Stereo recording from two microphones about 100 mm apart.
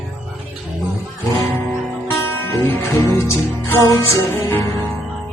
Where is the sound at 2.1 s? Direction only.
25° left (ahead or behind).